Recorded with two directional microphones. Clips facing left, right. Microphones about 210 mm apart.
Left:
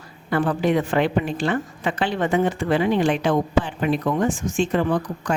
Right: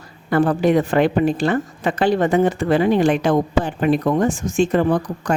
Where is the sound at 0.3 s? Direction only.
40° right (ahead or behind).